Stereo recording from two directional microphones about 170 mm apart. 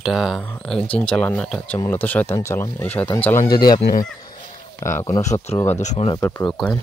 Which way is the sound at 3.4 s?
60° left (ahead or behind).